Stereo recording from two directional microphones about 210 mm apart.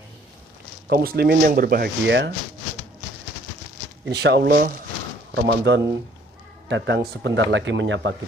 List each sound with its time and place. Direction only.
0.8 s speech: 45° right (ahead or behind)
4.1 s speech: 50° right (ahead or behind)